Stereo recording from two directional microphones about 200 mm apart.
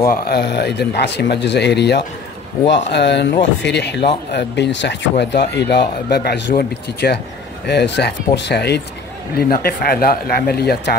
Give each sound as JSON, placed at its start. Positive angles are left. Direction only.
{"t": 0.1, "sound": "speech", "side_deg": 55}